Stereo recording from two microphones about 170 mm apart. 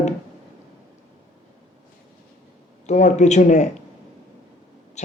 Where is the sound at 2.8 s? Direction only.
45° left (ahead or behind).